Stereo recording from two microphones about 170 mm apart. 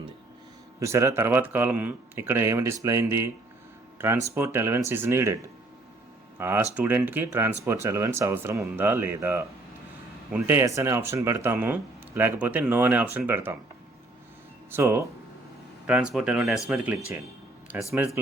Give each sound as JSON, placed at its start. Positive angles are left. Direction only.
{"t": 0.8, "sound": "speech", "side_deg": -20}
{"t": 6.4, "sound": "speech", "side_deg": -15}
{"t": 14.7, "sound": "speech", "side_deg": -15}
{"t": 15.9, "sound": "speech", "side_deg": -5}